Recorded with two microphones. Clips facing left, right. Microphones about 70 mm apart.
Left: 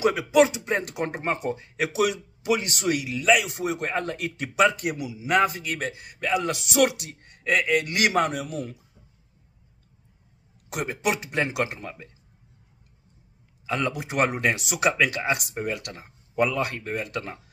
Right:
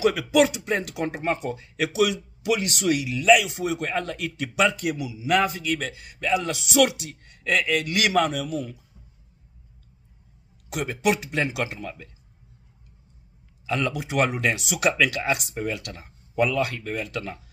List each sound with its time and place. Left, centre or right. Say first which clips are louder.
0.0 s a man's voice: even; left
0.8 s a man's voice: right 1 dB; left
7.1 s a man's voice: left 1 dB; left
10.7 s a man's voice: right 3 dB; left
13.7 s a man's voice: right 1 dB; left
15.0 s a man's voice: right 1 dB; left